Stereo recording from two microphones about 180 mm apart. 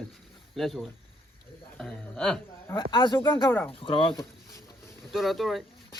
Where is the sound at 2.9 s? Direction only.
25° left (ahead or behind).